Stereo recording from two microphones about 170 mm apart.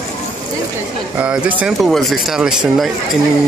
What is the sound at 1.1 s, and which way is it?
Speech, 5° right (ahead or behind).